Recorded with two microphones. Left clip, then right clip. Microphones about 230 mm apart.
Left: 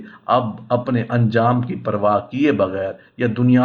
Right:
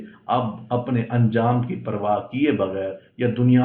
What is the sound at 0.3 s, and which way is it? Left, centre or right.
Speech, left.